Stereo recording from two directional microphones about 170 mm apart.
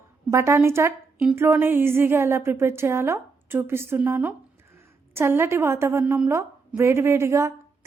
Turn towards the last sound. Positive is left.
turn(degrees=-15)  # may be behind; listen again after turning